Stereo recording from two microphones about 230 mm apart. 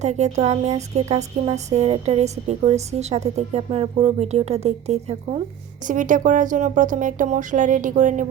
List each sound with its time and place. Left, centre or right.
0.0 s speech: right